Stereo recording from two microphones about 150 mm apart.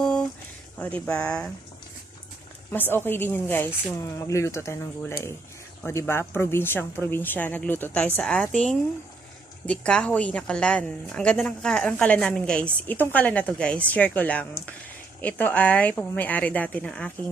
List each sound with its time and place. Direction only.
0.0 s a sound: 5° left (ahead or behind)
1.0 s a woman's voice: 5° left (ahead or behind)
2.7 s a woman's voice: 15° left (ahead or behind)